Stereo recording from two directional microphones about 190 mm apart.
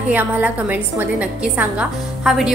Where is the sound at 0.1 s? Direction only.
10° right (ahead or behind).